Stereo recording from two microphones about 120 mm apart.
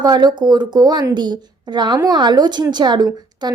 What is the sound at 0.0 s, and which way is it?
Speech, 35° right (ahead or behind).